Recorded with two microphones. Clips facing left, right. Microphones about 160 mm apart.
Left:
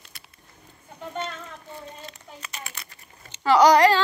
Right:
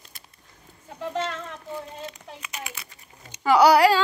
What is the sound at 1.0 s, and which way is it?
Speech, 90° right.